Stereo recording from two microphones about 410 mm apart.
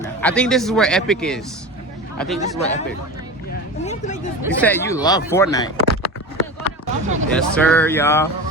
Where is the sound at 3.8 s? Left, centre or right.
Centre.